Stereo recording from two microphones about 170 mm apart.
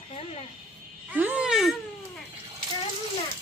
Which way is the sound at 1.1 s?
10° right (ahead or behind).